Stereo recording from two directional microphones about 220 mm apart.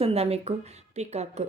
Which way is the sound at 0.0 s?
25° right (ahead or behind).